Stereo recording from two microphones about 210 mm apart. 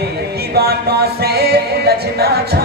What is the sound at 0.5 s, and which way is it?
Music, 50° right (ahead or behind).